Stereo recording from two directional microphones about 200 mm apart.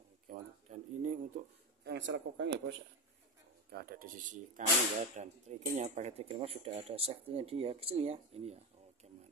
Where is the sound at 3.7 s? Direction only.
50° right (ahead or behind); by 8.6 s 30° right (ahead or behind).